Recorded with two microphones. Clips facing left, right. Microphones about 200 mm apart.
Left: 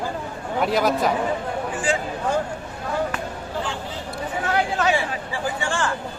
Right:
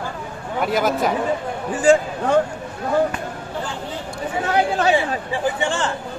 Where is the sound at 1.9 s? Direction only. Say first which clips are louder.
Right 11 dB; 45° right (ahead or behind).